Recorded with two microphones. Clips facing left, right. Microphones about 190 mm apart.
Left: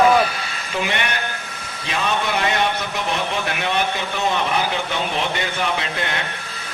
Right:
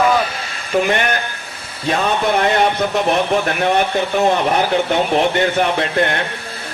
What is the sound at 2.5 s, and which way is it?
Speech, 55° right (ahead or behind).